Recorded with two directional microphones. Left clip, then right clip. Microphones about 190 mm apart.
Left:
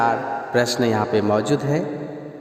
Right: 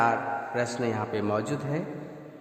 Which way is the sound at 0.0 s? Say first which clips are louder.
Left 5 dB; 45° left (ahead or behind).